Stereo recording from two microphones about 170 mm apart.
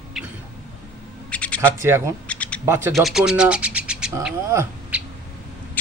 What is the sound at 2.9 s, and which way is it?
Speech, centre (ahead or behind).